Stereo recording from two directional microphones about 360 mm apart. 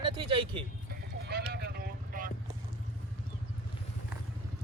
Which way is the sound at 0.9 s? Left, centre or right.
Right.